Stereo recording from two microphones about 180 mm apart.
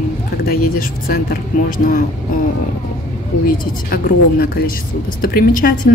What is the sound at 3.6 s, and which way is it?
A woman's voice, 55° left (ahead or behind).